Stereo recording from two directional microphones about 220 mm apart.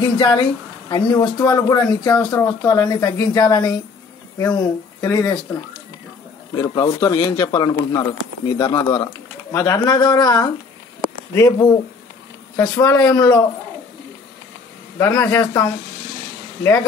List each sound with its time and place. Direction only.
0.0 s speech: 20° left (ahead or behind)
15.0 s speech: 15° left (ahead or behind)